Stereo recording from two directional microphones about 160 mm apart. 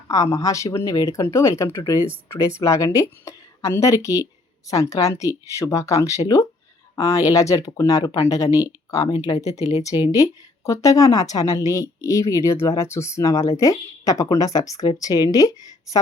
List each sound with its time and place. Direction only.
0.1 s speech: 20° left (ahead or behind)